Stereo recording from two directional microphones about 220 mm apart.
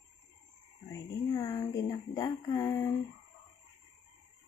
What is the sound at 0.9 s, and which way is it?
Speech, 15° left (ahead or behind).